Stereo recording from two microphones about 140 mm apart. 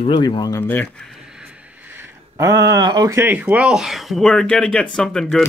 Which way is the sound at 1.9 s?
20° right (ahead or behind).